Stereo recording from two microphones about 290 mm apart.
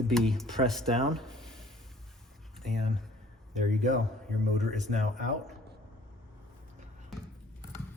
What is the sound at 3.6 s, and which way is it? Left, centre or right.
Speech, right.